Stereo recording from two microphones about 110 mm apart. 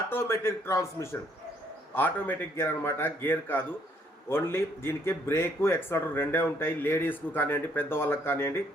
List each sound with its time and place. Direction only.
0.1 s speech: 20° left (ahead or behind)